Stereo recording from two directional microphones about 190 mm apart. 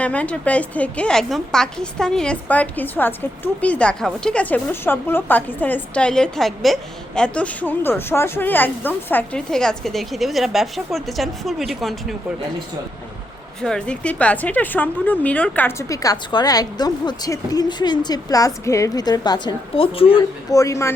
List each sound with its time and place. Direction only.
0.0 s a woman's voice: 5° left (ahead or behind)
13.6 s a woman's voice: 5° left (ahead or behind)